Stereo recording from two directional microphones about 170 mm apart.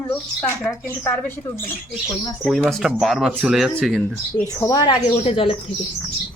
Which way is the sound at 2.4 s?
5° right (ahead or behind).